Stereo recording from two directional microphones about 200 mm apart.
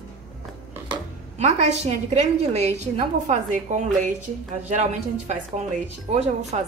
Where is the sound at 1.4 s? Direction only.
35° right (ahead or behind).